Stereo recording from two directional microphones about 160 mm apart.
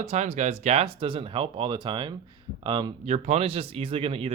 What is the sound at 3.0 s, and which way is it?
Speech, 45° right (ahead or behind).